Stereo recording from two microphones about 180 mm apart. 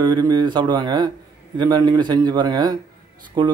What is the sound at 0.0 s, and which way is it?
A man's voice, 25° right (ahead or behind).